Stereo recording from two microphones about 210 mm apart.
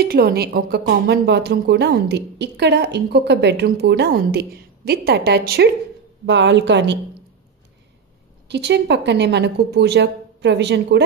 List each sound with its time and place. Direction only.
0.0 s a woman's voice: 50° right (ahead or behind)
8.5 s a woman's voice: 55° right (ahead or behind)